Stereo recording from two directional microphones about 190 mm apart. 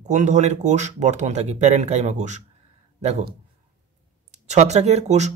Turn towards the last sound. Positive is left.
turn(degrees=-35)  # may be behind; listen again after turning